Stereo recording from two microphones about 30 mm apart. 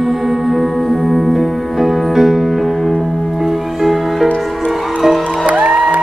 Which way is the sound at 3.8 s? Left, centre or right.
Centre.